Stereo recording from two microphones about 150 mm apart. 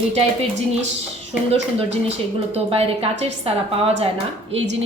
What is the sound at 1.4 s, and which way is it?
Speech, 45° right (ahead or behind).